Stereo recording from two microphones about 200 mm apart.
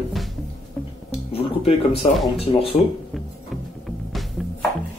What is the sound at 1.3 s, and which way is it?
Speech, 30° left (ahead or behind).